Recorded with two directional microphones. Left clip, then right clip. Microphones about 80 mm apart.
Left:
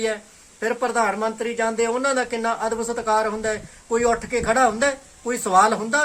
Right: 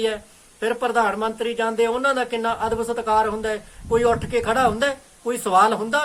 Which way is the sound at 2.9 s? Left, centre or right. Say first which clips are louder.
Right 1 dB; centre.